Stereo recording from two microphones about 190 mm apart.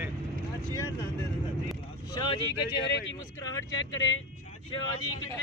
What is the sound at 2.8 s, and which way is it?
Speech, 65° left (ahead or behind).